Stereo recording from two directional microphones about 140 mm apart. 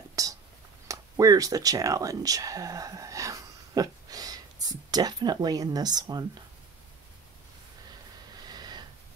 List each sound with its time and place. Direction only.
0.1 s whispering: 25° right (ahead or behind)
0.8 s speech: 25° right (ahead or behind)
8.5 s snort: 30° right (ahead or behind)